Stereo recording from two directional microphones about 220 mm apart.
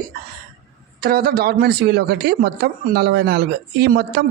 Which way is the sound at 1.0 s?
45° right (ahead or behind).